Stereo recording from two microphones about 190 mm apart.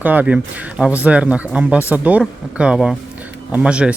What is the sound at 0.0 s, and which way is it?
Speech, 10° right (ahead or behind).